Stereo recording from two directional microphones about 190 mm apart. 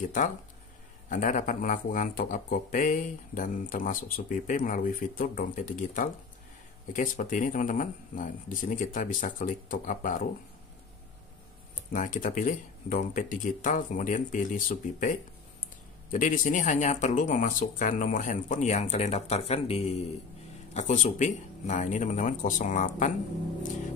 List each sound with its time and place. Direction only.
0.0 s speech: 45° left (ahead or behind)
11.9 s speech: 45° left (ahead or behind)